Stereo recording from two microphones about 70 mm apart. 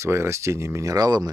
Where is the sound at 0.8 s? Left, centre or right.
Right.